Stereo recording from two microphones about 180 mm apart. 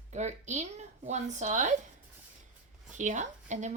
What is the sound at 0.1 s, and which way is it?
A woman's voice, 40° right (ahead or behind).